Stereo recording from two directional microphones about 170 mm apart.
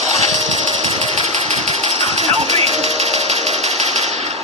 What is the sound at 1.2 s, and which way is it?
Engine, 40° right (ahead or behind).